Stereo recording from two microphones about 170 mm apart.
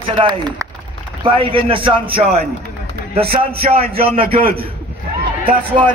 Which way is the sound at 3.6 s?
35° right (ahead or behind).